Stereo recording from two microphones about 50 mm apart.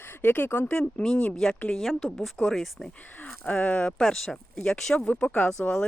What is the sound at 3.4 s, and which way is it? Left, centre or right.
Speech, left.